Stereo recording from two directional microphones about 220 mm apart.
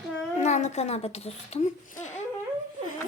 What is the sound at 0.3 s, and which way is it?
A child's voice, 30° left (ahead or behind).